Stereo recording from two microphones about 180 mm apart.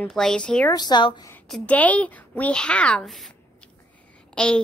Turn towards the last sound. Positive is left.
turn(degrees=5)  # may be behind; listen again after turning